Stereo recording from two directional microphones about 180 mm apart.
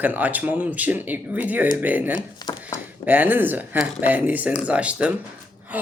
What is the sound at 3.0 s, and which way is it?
Speech, 10° right (ahead or behind).